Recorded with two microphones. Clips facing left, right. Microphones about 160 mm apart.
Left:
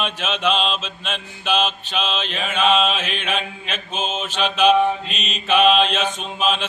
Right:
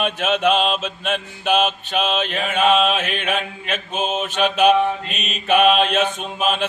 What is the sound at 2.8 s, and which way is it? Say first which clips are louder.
Mantra: right 2 dB; 55° right (ahead or behind).